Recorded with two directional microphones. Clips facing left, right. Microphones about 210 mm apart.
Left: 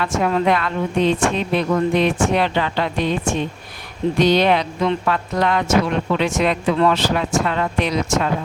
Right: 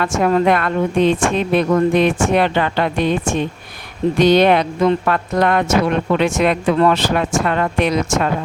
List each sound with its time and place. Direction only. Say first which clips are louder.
0.0 s speech: right 3 dB; 45° right (ahead or behind)
4.2 s speech: right 4 dB; 55° right (ahead or behind)